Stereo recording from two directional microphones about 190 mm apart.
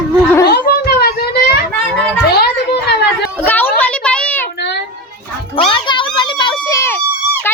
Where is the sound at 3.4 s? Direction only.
10° left (ahead or behind).